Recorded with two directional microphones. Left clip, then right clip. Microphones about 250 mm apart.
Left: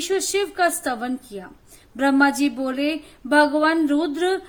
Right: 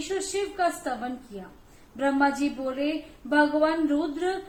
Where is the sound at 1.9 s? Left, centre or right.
Left.